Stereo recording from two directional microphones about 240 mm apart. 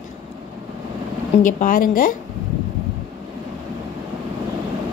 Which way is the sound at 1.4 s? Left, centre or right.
Left.